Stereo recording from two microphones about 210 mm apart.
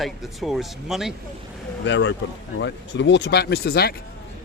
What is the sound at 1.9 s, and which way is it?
Speech, 60° left (ahead or behind).